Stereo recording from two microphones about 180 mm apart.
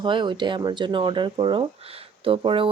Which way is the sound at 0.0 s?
25° right (ahead or behind).